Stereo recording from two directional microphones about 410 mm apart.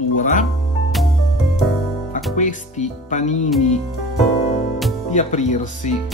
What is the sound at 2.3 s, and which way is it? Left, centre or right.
Speech, centre.